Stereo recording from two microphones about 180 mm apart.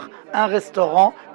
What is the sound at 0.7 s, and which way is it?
Speech, 25° right (ahead or behind).